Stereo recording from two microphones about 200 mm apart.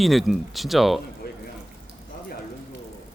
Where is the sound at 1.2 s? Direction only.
50° left (ahead or behind).